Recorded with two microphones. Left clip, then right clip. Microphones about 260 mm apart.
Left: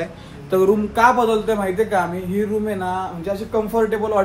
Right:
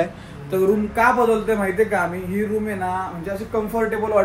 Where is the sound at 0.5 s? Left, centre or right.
Left.